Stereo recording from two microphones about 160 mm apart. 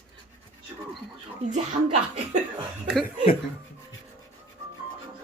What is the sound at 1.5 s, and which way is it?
Speech, 45° right (ahead or behind).